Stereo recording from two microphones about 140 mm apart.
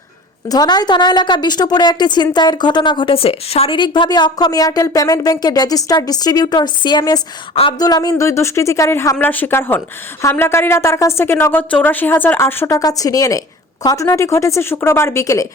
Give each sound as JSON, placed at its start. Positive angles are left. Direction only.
{"t": 0.4, "sound": "a woman's voice", "side_deg": 25}